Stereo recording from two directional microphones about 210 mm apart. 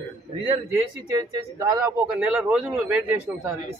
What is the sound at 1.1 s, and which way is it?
Speech, 15° right (ahead or behind).